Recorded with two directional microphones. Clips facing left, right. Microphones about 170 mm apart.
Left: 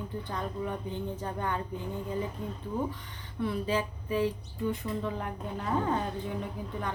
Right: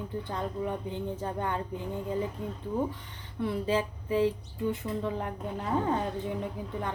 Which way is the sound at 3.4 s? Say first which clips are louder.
Right 1 dB; 25° right (ahead or behind).